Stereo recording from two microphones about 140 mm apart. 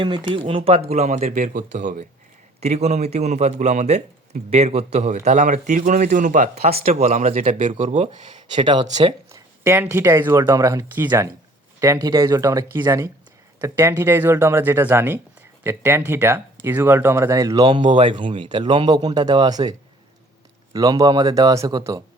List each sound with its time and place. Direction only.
0.3 s speech: 40° right (ahead or behind)
0.9 s a man's voice: 55° right (ahead or behind)
2.6 s a man's voice: 50° right (ahead or behind); by 6.5 s 70° right (ahead or behind)
6.6 s a man's voice: 45° right (ahead or behind)
8.5 s speech: 35° right (ahead or behind)
9.3 s speech: 20° right (ahead or behind)
20.7 s speech: 25° right (ahead or behind)